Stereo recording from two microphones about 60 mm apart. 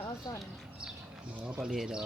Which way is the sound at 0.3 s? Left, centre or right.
Left.